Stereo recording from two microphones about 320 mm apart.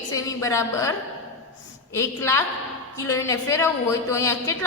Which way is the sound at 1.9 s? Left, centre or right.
Centre.